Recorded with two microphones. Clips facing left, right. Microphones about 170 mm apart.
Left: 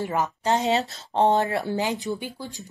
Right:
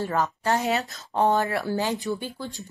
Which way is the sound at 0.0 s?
20° left (ahead or behind).